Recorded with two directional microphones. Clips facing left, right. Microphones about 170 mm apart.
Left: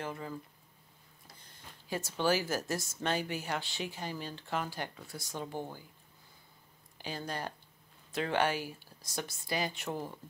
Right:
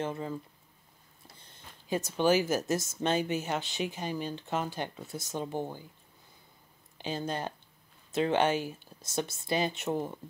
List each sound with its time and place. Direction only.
0.0 s speech: 25° right (ahead or behind)
7.0 s speech: 20° right (ahead or behind)